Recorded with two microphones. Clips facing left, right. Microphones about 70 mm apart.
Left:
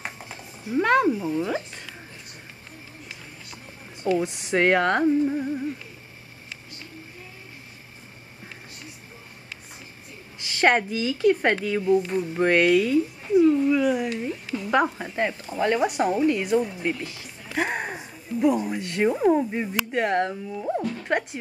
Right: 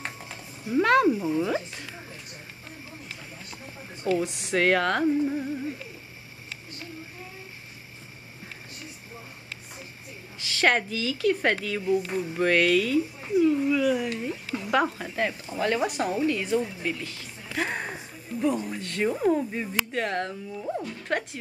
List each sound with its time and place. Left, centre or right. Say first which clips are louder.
0.0 s a sound: left 1 dB; centre
1.3 s speech: even; centre
4.2 s speech: left 2 dB; centre
4.6 s speech: left 3 dB; centre
10.4 s a woman's voice: left 3 dB; centre
21.0 s music: left 3 dB; centre